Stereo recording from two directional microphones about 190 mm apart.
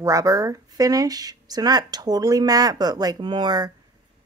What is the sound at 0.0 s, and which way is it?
Speech, 15° right (ahead or behind).